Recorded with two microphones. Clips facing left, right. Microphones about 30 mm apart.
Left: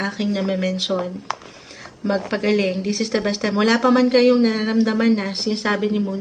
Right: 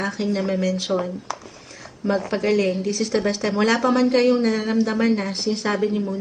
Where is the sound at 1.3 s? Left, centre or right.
Left.